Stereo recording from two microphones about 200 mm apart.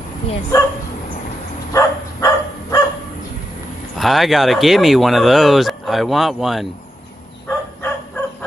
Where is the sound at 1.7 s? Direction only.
15° left (ahead or behind).